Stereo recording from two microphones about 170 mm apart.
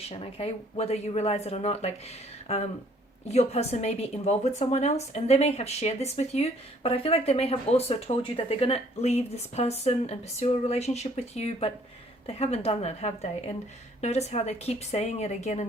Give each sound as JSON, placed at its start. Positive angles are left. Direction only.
{"t": 0.1, "sound": "speech", "side_deg": 35}